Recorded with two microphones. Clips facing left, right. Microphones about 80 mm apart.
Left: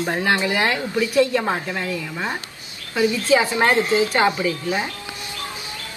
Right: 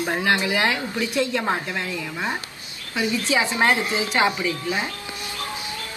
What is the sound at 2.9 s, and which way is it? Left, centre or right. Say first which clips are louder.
Speech: left 5 dB; centre.